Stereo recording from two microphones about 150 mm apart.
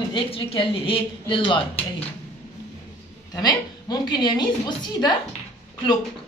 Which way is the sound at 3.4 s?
25° left (ahead or behind).